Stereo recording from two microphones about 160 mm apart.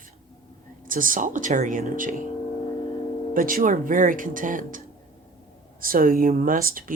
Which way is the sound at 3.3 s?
60° right (ahead or behind).